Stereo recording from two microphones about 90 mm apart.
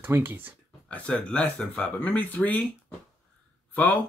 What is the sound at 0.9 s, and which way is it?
Speech, 10° left (ahead or behind).